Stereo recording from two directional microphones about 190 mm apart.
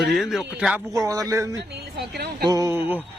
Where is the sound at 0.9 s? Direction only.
20° right (ahead or behind).